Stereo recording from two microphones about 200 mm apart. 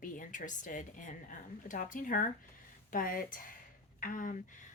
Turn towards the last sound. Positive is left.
turn(degrees=40)  # may be behind; listen again after turning